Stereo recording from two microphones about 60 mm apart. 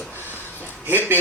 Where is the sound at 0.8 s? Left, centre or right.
Right.